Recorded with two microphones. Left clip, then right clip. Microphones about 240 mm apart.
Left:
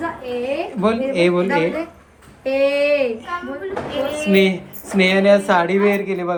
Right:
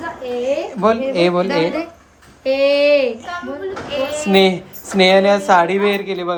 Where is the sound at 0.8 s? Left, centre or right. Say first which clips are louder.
Right 2 dB; centre.